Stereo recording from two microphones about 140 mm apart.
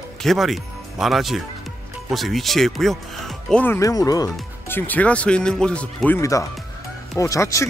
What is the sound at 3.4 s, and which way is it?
Speech, 10° left (ahead or behind).